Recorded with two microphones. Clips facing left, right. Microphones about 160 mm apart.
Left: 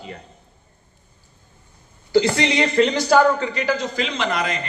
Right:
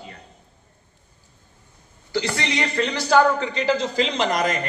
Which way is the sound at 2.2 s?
20° left (ahead or behind).